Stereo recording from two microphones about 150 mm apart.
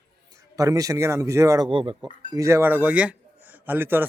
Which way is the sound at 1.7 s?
35° right (ahead or behind).